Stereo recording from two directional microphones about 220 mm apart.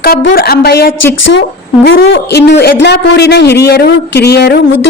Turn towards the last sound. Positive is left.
turn(degrees=45)  # may be behind; listen again after turning